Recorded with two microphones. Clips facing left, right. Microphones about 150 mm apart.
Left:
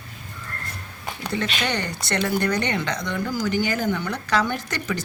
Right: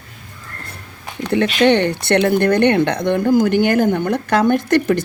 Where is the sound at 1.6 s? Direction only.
60° right (ahead or behind).